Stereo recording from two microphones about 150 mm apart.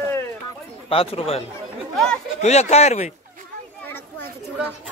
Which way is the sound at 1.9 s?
5° left (ahead or behind).